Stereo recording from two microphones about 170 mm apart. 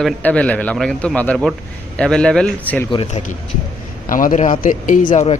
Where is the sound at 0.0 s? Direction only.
10° left (ahead or behind).